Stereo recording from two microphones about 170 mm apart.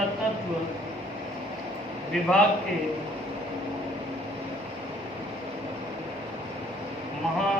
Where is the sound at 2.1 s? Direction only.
5° left (ahead or behind).